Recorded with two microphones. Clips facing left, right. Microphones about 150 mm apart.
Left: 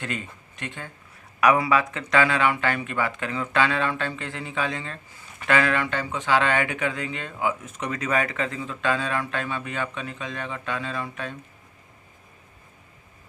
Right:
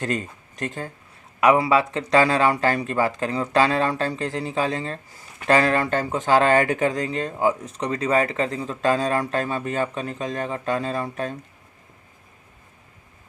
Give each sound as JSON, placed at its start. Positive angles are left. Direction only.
{"t": 0.0, "sound": "speech", "side_deg": -40}
{"t": 1.4, "sound": "speech", "side_deg": -30}